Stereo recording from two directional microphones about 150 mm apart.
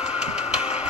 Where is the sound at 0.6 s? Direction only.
45° left (ahead or behind).